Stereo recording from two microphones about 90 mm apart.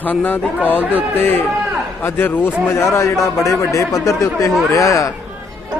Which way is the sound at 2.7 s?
30° left (ahead or behind).